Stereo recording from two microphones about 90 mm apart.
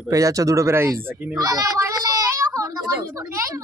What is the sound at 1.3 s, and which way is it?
Child singing, 40° right (ahead or behind).